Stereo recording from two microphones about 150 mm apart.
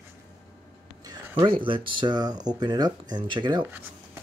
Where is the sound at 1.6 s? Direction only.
35° right (ahead or behind).